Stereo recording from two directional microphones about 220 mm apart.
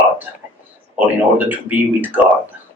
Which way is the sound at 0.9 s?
10° right (ahead or behind).